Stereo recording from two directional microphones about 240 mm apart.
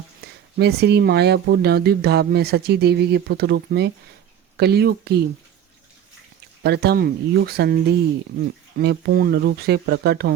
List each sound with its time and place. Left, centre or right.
0.2 s a sound: right
0.6 s speech: right
6.6 s speech: right